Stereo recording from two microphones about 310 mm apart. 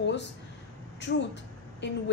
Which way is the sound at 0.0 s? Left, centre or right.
Left.